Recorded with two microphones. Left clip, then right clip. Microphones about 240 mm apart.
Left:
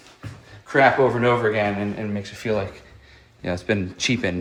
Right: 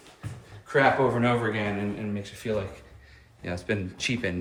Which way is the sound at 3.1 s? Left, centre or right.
Left.